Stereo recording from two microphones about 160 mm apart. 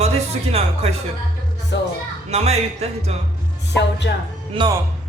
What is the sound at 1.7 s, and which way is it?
Speech, 90° left.